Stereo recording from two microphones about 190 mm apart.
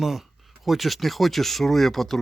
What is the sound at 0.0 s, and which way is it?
Speech, centre (ahead or behind).